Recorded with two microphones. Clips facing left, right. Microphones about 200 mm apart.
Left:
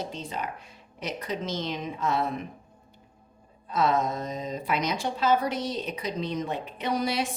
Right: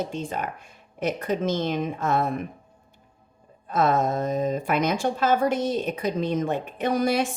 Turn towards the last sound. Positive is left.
turn(degrees=-50)  # may be behind; listen again after turning